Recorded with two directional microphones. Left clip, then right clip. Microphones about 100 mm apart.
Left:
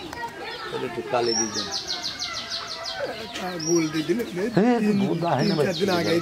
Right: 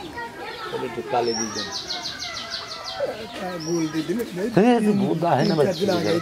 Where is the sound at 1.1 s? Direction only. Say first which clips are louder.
Right 1 dB; 35° left (ahead or behind).